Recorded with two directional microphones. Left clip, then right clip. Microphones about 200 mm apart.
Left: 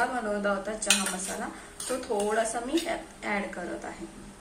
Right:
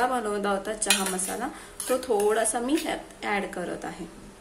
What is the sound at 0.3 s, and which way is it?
Speech, 55° right (ahead or behind).